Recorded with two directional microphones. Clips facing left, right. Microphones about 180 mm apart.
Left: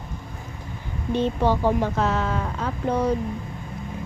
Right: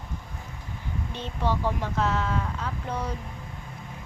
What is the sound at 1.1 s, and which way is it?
Speech, 50° left (ahead or behind).